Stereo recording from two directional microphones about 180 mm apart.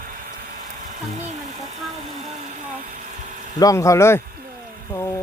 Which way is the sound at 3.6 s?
20° left (ahead or behind).